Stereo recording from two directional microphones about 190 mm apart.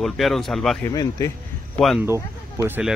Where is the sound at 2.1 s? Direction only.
15° right (ahead or behind).